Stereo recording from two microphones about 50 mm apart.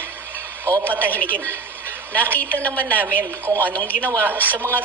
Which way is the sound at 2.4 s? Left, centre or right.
Left.